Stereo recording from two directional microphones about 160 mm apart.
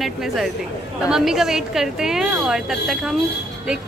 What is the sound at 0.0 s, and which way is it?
Speech, centre (ahead or behind).